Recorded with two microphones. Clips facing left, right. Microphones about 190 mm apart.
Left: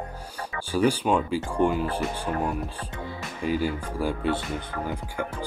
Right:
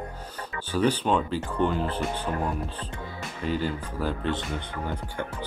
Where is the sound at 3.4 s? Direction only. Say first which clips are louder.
Left 2 dB; 10° left (ahead or behind).